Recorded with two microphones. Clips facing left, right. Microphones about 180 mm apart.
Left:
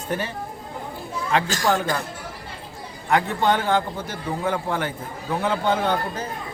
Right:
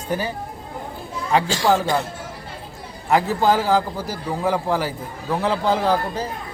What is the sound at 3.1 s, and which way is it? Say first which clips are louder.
A man's voice: right 3 dB; 5° right (ahead or behind).